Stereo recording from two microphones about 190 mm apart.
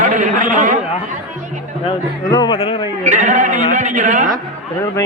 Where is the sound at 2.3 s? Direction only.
25° left (ahead or behind).